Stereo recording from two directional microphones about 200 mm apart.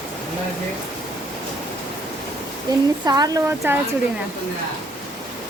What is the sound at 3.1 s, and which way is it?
Speech, 20° right (ahead or behind).